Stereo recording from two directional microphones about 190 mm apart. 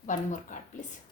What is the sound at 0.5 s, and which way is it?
Speech, 40° left (ahead or behind).